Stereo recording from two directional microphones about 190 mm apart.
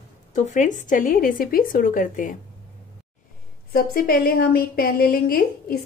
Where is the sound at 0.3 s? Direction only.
40° left (ahead or behind).